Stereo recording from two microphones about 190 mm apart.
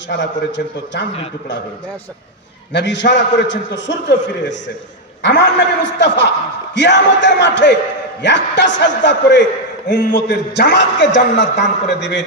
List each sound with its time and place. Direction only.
0.1 s a man's voice: 70° left (ahead or behind)
2.7 s a man's voice: 65° left (ahead or behind)
5.2 s a man's voice: 65° left (ahead or behind)